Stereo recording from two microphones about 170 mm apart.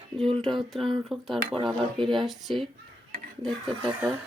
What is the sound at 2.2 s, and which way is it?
Speech, centre (ahead or behind).